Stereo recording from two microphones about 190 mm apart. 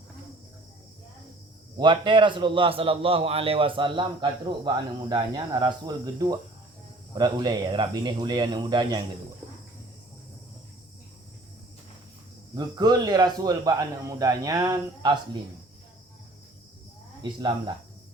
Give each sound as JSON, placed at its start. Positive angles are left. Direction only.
{"t": 1.8, "sound": "a man's voice", "side_deg": -25}
{"t": 12.5, "sound": "a man's voice", "side_deg": -20}